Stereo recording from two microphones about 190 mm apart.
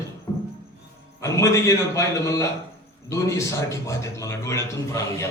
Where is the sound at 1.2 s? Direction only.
15° left (ahead or behind).